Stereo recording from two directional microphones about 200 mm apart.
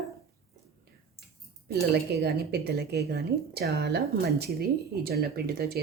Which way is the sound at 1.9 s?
55° right (ahead or behind).